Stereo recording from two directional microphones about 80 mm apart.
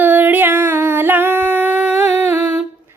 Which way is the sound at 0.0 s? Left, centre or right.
Right.